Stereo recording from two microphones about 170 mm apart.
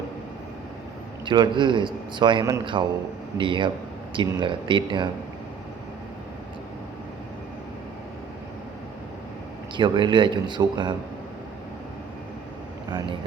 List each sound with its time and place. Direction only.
1.2 s a man's voice: 30° right (ahead or behind)
9.7 s a man's voice: 25° right (ahead or behind)